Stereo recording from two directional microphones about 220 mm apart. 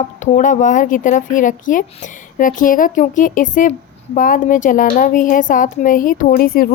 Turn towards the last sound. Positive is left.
turn(degrees=40)  # may be behind; listen again after turning